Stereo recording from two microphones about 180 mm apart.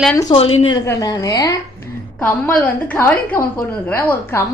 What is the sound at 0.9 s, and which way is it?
A woman's voice, 20° left (ahead or behind).